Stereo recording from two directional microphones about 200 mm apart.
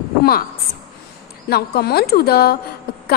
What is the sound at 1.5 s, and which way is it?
A woman's voice, 55° left (ahead or behind).